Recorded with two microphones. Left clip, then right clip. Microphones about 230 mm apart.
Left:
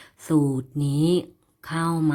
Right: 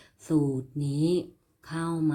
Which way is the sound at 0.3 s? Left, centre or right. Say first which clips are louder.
Left 4 dB; left.